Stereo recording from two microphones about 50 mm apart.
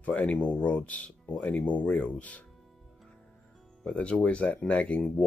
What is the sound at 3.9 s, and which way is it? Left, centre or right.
Speech, left.